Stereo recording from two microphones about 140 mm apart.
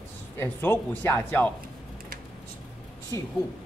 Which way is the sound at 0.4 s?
15° left (ahead or behind).